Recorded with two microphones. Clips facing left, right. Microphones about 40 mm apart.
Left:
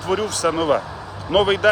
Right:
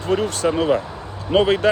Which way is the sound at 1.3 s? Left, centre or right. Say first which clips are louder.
Even; left.